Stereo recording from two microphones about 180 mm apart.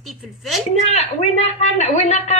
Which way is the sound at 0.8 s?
35° left (ahead or behind).